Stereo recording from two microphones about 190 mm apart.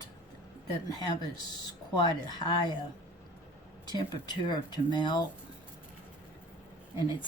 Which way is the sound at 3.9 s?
20° left (ahead or behind).